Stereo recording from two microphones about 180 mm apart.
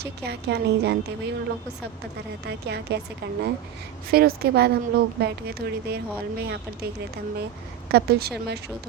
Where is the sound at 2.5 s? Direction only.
70° right (ahead or behind).